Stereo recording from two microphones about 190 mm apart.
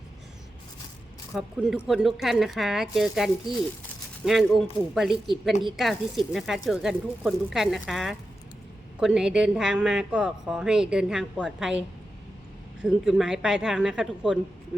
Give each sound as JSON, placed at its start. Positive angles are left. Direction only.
{"t": 1.3, "sound": "a woman's voice", "side_deg": -5}
{"t": 5.7, "sound": "a woman's voice", "side_deg": 0}
{"t": 12.8, "sound": "a woman's voice", "side_deg": -5}